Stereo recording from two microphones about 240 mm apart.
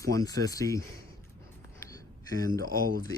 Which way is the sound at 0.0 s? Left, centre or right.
Centre.